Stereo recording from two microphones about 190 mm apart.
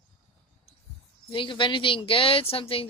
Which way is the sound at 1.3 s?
25° left (ahead or behind).